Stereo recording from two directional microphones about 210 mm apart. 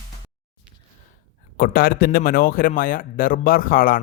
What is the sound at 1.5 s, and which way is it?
Speech, 45° left (ahead or behind).